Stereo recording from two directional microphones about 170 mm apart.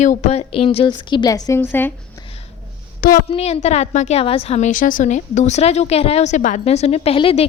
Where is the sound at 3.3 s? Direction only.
35° left (ahead or behind).